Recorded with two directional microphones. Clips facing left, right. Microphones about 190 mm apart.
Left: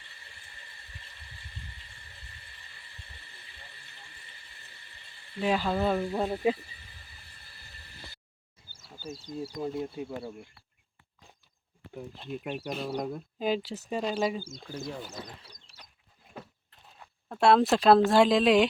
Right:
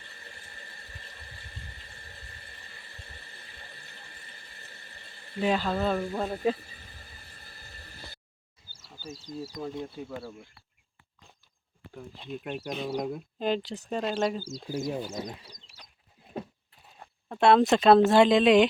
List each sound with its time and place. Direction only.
5.4 s speech: 5° left (ahead or behind)
7.3 s a sound: 45° right (ahead or behind)
9.0 s speech: 55° left (ahead or behind)
9.6 s speech: 5° left (ahead or behind)
12.2 s speech: centre (ahead or behind)
14.7 s speech: 20° right (ahead or behind)
17.2 s speech: centre (ahead or behind)